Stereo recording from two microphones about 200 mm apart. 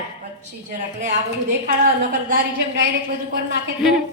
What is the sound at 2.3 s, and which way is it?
Speech, 50° right (ahead or behind).